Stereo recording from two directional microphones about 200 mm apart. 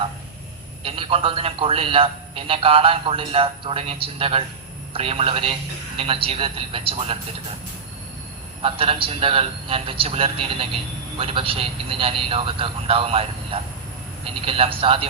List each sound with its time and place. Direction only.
0.9 s a man's voice: 25° right (ahead or behind)
8.6 s a man's voice: 25° right (ahead or behind)